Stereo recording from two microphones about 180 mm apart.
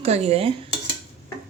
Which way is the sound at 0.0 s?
35° right (ahead or behind).